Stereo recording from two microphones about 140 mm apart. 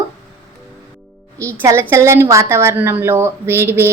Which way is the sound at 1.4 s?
20° right (ahead or behind).